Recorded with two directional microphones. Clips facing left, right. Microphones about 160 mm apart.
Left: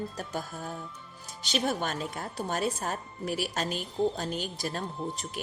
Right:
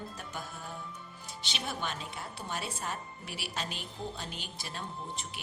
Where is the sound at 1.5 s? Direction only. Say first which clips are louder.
Left 8 dB; 45° left (ahead or behind).